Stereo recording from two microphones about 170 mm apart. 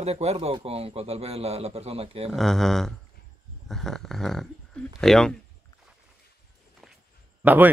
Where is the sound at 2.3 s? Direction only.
Centre (ahead or behind).